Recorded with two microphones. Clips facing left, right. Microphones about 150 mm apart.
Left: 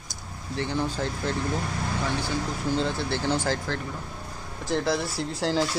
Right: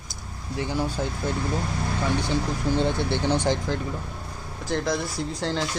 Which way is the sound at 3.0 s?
20° right (ahead or behind).